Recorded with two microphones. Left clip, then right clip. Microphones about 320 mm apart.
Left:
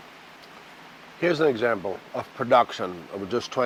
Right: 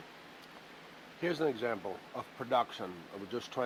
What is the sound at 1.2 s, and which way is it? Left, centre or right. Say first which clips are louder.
Speech: left 12 dB; left.